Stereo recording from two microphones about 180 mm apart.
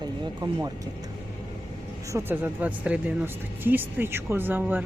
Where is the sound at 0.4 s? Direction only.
25° right (ahead or behind).